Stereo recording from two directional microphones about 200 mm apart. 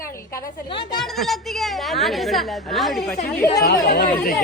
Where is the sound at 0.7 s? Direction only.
25° left (ahead or behind).